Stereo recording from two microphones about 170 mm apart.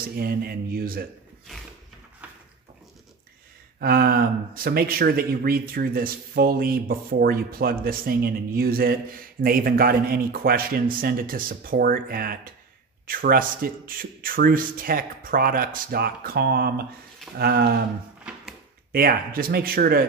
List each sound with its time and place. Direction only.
0.1 s speech: 65° right (ahead or behind)
2.2 s a sound: 10° right (ahead or behind)
3.8 s speech: 60° right (ahead or behind)
18.9 s speech: 60° right (ahead or behind)